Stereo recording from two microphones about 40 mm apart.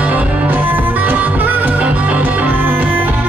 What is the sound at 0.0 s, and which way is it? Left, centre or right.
Music, right.